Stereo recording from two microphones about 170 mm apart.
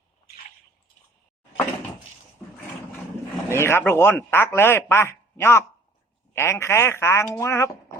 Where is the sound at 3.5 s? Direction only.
15° left (ahead or behind).